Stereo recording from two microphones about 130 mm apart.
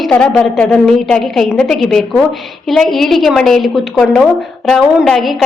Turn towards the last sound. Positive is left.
turn(degrees=0)  # may be behind; listen again after turning